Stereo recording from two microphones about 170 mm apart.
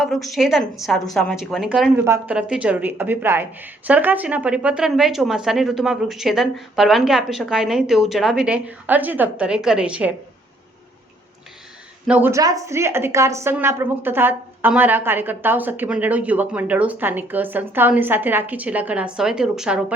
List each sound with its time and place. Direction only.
0.0 s a woman's voice: centre (ahead or behind)
2.0 s a woman's voice: 15° right (ahead or behind)
12.0 s a woman's voice: 10° right (ahead or behind)